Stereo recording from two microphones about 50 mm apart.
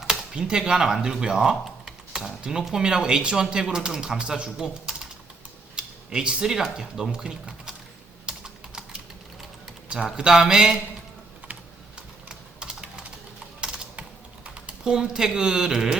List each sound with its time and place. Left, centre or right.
0.0 s speech: centre
8.3 s typing: centre
10.2 s speech: centre
12.3 s typing: centre
14.7 s speech: centre